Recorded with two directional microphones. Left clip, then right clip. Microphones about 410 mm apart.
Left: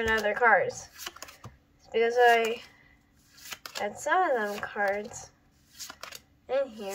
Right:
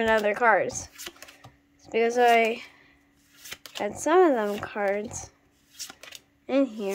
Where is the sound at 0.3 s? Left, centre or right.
Right.